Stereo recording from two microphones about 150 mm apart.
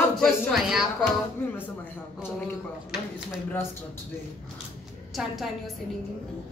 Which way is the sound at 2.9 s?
5° right (ahead or behind).